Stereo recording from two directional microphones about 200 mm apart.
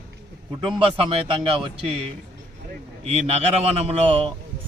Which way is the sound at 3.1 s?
30° right (ahead or behind).